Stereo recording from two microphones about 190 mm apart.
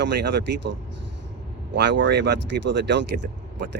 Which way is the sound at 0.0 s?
65° right (ahead or behind).